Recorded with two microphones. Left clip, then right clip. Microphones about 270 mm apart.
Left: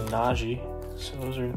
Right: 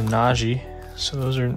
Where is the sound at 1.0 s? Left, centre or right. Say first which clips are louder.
Right 11 dB; right.